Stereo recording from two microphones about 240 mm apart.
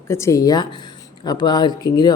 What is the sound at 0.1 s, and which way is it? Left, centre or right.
Speech, centre.